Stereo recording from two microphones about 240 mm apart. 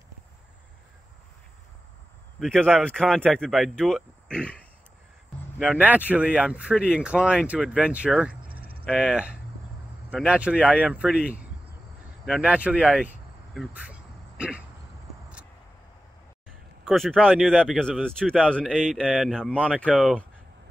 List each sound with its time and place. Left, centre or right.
2.4 s speech: centre
5.6 s speech: centre
8.5 s a sound: right
8.8 s speech: centre
16.8 s speech: centre